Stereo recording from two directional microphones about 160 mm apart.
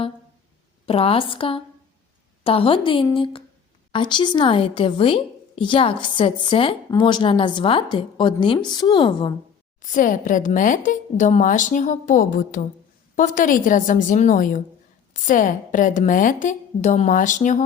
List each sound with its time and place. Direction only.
0.9 s a woman's voice: 35° left (ahead or behind)
9.8 s a woman's voice: 55° left (ahead or behind)